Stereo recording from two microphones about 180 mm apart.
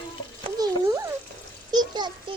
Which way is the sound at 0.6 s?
15° right (ahead or behind).